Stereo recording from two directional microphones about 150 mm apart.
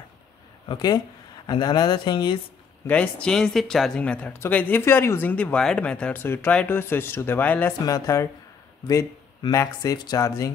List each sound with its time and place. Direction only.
0.7 s speech: 30° left (ahead or behind)
2.9 s speech: 10° left (ahead or behind)